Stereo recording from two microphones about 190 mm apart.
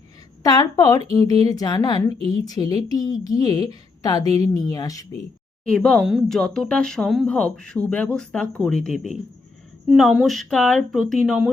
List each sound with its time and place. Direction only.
0.4 s a woman's voice: 20° left (ahead or behind)
5.6 s speech: 5° left (ahead or behind)